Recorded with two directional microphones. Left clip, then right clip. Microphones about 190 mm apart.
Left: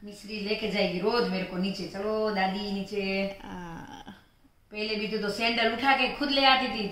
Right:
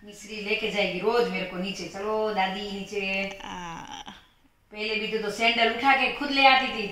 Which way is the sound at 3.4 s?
20° left (ahead or behind).